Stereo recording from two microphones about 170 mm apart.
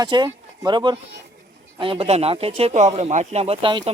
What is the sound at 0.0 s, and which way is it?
Speech, 25° right (ahead or behind).